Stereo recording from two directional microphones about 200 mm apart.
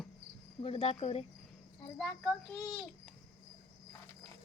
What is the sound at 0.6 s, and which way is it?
Speech, 30° left (ahead or behind).